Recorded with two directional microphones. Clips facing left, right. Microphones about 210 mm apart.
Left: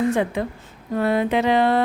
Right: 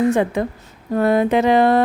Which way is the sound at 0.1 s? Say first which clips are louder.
Right 4 dB; 45° right (ahead or behind).